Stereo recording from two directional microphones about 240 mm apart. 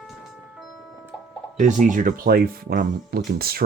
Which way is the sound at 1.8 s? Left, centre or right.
Right.